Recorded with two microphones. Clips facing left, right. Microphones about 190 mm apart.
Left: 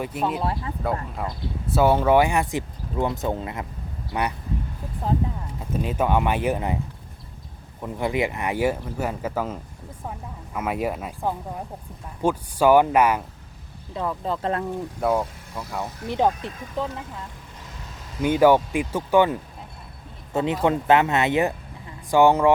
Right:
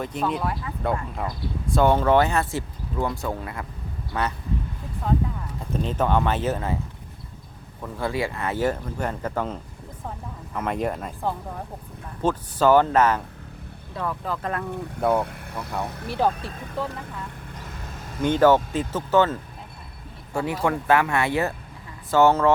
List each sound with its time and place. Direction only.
0.0 s speech: 5° left (ahead or behind)
5.0 s speech: 30° left (ahead or behind)
5.7 s speech: 10° left (ahead or behind)
7.8 s speech: 15° left (ahead or behind)
13.9 s speech: 20° left (ahead or behind)
15.2 s speech: 60° right (ahead or behind)
16.0 s speech: 15° left (ahead or behind)
18.2 s speech: 10° left (ahead or behind)